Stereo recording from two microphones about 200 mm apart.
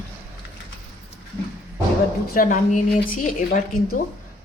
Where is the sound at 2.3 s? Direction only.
40° left (ahead or behind).